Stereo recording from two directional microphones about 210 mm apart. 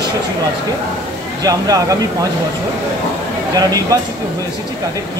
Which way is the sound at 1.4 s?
15° right (ahead or behind).